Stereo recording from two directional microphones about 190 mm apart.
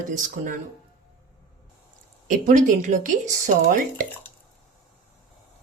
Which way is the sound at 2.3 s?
40° right (ahead or behind).